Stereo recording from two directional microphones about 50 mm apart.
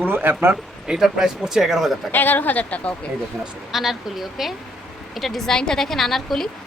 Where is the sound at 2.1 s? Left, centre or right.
Left.